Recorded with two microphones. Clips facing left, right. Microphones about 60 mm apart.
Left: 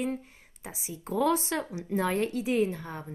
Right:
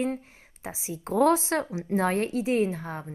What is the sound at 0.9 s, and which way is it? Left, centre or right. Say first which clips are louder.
Speech: right 5 dB; right.